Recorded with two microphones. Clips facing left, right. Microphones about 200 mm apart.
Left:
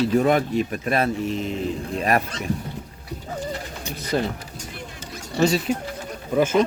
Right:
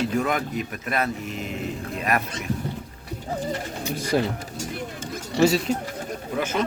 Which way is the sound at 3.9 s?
10° right (ahead or behind).